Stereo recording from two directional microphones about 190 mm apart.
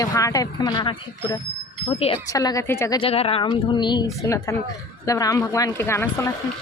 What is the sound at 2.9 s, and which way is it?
Speech, 30° left (ahead or behind).